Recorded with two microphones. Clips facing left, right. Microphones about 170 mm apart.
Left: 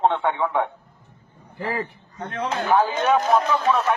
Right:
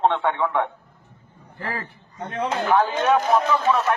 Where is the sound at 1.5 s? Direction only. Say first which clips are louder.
Left 4 dB; 15° left (ahead or behind).